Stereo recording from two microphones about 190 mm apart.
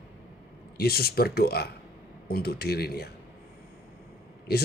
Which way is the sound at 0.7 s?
55° left (ahead or behind).